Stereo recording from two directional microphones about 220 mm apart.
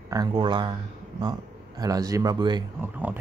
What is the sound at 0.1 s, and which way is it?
Speech, 20° right (ahead or behind).